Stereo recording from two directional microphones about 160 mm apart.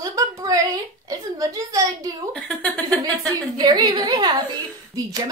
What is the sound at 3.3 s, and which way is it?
A woman's voice, 25° right (ahead or behind).